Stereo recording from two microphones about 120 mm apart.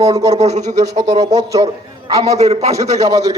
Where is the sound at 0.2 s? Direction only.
25° right (ahead or behind).